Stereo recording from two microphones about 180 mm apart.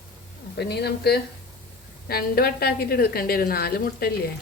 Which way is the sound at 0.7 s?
65° left (ahead or behind).